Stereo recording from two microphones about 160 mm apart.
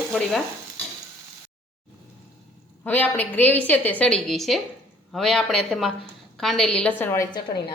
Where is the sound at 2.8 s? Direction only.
10° left (ahead or behind).